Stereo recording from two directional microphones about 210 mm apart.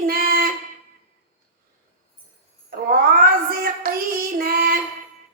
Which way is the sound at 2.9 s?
45° right (ahead or behind).